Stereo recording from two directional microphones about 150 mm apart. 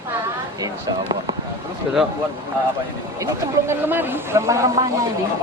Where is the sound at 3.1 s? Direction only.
20° right (ahead or behind).